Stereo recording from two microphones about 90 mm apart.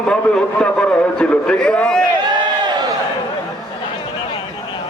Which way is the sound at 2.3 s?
50° right (ahead or behind).